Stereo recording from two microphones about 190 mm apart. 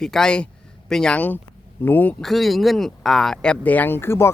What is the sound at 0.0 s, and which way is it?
Speech, 5° left (ahead or behind).